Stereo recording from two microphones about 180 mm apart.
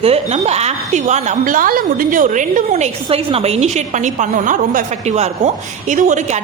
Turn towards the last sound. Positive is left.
turn(degrees=-40)  # may be behind; listen again after turning